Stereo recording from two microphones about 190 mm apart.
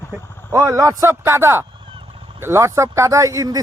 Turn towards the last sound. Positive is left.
turn(degrees=-20)  # may be behind; listen again after turning